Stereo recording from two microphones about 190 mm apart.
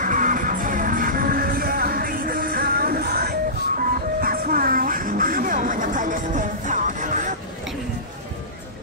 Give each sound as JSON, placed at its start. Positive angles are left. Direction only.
{"t": 0.0, "sound": "music", "side_deg": -45}